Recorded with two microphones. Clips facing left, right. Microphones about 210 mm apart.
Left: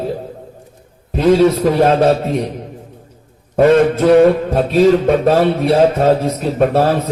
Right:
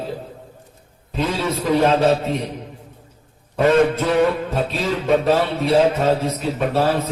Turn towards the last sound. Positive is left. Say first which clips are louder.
# left 6 dB
turn(degrees=50)  # may be behind; listen again after turning